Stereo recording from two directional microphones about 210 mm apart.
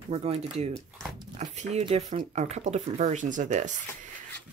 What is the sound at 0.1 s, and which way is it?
Speech, 30° right (ahead or behind).